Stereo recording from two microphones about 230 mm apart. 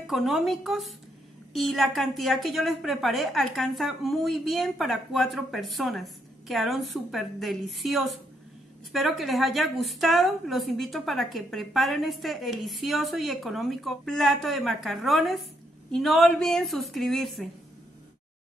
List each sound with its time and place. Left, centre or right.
0.0 s a woman's voice: centre